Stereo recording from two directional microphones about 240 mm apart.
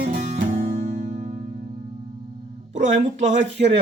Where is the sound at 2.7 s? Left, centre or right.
Right.